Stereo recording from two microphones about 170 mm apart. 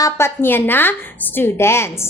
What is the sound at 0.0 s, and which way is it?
A woman's voice, 15° left (ahead or behind).